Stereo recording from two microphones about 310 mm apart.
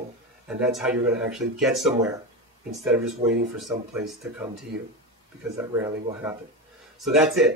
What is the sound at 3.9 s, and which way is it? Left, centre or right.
Speech, centre.